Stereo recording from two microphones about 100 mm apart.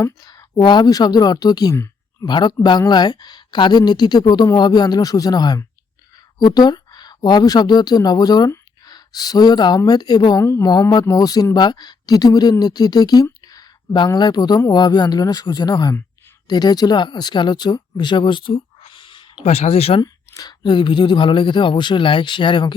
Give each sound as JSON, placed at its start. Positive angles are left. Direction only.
{"t": 0.0, "sound": "speech", "side_deg": 45}
{"t": 10.4, "sound": "speech", "side_deg": 25}
{"t": 10.7, "sound": "speech", "side_deg": 45}
{"t": 20.0, "sound": "speech", "side_deg": 40}